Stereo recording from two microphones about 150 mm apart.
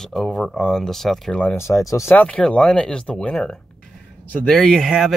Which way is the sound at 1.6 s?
20° left (ahead or behind).